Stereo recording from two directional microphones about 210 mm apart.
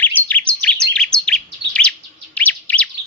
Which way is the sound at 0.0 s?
10° left (ahead or behind).